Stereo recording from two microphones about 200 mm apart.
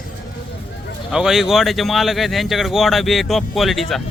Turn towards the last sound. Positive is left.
turn(degrees=0)  # may be behind; listen again after turning